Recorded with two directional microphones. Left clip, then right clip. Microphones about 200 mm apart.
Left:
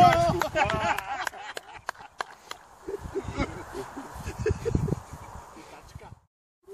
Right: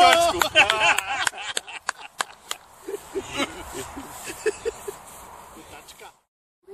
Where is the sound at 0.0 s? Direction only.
30° left (ahead or behind).